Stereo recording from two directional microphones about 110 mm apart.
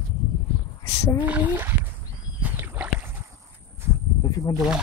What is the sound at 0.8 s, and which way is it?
Speech, 30° left (ahead or behind).